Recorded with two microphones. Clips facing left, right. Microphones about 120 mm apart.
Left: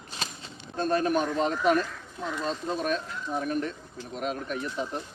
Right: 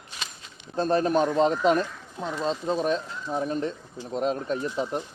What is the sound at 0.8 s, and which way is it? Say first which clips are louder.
Speech: right 3 dB; 30° right (ahead or behind).